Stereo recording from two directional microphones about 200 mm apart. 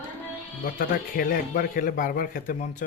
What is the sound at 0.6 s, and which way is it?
Speech, 45° left (ahead or behind).